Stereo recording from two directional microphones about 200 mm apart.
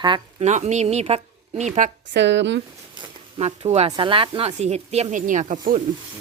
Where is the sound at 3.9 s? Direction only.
25° right (ahead or behind).